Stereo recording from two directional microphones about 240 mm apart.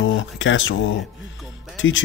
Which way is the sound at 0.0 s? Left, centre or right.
Left.